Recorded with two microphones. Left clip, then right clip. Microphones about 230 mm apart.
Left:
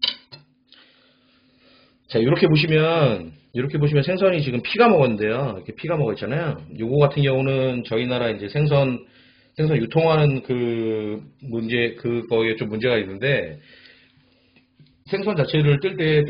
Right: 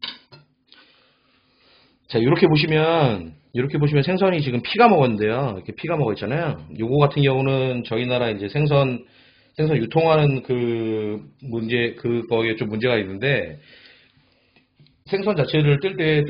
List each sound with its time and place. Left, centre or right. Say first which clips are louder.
2.0 s a man's voice: right 1 dB; right
15.0 s a man's voice: right 1 dB; right